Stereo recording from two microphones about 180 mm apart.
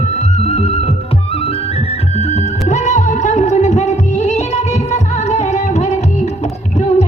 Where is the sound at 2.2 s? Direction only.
35° left (ahead or behind).